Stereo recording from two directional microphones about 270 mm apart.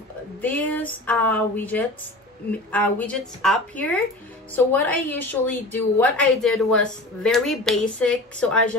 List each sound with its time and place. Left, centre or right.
0.4 s a woman's voice: centre